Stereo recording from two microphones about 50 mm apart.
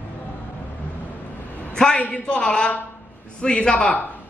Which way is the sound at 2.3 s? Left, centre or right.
Centre.